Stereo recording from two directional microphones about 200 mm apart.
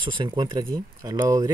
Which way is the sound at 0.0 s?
25° right (ahead or behind).